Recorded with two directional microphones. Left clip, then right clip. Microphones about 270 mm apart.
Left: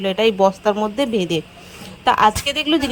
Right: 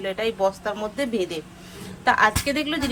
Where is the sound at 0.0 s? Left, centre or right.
Left.